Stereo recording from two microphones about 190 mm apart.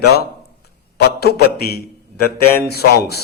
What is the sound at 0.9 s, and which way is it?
A man's voice, 55° left (ahead or behind).